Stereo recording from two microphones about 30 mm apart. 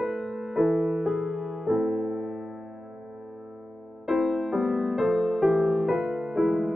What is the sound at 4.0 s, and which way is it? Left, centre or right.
Music, centre.